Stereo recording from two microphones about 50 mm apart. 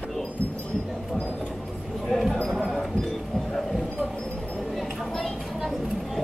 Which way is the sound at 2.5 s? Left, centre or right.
Centre.